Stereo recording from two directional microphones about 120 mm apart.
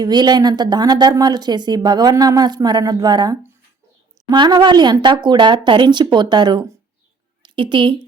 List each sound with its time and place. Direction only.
0.0 s a woman's voice: 35° right (ahead or behind)